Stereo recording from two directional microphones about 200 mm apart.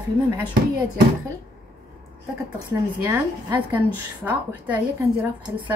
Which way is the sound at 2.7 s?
10° right (ahead or behind).